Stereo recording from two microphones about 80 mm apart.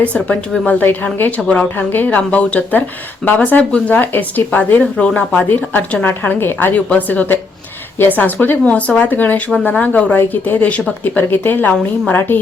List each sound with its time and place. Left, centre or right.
0.0 s a woman's voice: centre